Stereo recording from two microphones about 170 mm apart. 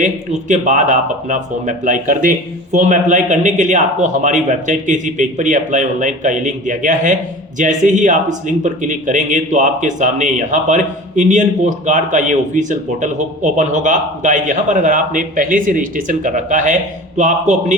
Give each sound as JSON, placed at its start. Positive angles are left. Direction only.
{"t": 0.0, "sound": "speech", "side_deg": -50}